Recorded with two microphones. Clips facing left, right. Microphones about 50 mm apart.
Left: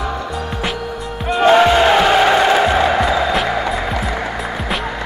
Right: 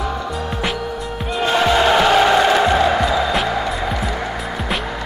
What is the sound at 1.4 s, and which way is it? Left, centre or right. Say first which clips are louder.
Music: left 5 dB; left.